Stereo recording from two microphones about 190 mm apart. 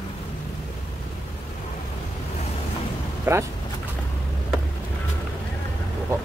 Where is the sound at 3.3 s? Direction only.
10° right (ahead or behind).